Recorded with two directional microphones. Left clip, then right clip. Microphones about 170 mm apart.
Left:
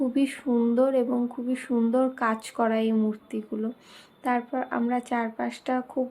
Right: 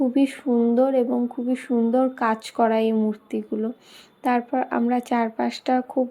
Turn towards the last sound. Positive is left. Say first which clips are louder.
# right 6 dB
turn(degrees=-25)  # may be behind; listen again after turning